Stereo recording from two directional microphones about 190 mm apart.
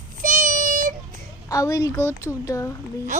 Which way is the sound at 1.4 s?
15° left (ahead or behind).